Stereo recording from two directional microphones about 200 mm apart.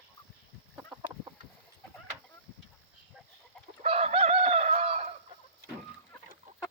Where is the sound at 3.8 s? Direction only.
30° right (ahead or behind).